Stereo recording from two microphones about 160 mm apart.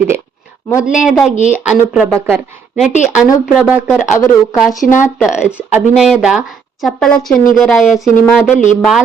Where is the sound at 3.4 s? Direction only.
Centre (ahead or behind).